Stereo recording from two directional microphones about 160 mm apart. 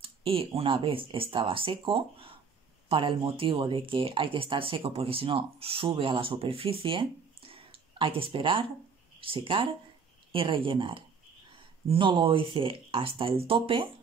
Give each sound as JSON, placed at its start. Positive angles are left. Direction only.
{"t": 0.0, "sound": "speech", "side_deg": -35}